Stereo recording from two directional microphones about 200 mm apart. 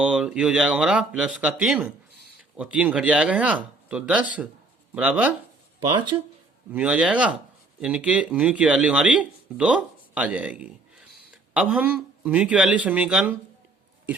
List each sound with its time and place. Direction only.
0.0 s speech: 5° right (ahead or behind)
5.9 s speech: 25° right (ahead or behind)
6.7 s speech: 5° right (ahead or behind)